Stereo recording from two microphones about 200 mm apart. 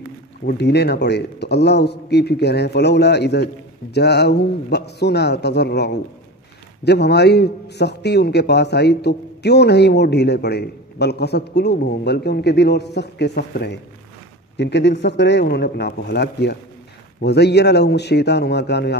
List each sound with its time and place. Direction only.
0.5 s a man's voice: 55° left (ahead or behind)